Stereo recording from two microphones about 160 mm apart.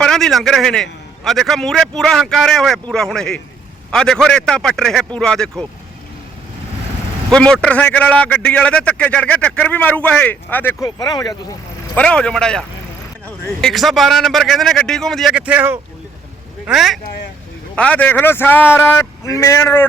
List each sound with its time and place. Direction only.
0.0 s a man's voice: 5° left (ahead or behind)
7.3 s a man's voice: 5° left (ahead or behind)
10.8 s speech: 25° left (ahead or behind)
11.9 s a man's voice: 5° left (ahead or behind)